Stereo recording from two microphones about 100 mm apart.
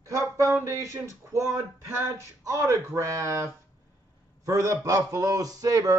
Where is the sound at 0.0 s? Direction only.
30° right (ahead or behind).